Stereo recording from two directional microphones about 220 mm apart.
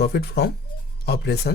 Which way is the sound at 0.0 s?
50° left (ahead or behind).